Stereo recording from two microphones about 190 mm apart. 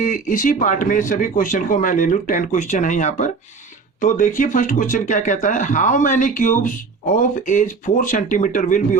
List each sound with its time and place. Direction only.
0.0 s speech: 45° left (ahead or behind)